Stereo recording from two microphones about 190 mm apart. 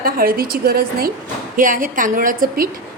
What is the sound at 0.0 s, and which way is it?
A woman's voice, 50° right (ahead or behind).